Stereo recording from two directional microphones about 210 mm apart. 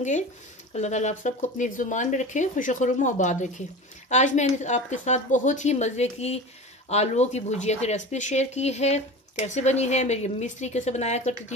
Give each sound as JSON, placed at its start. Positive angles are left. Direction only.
{"t": 0.7, "sound": "speech", "side_deg": 35}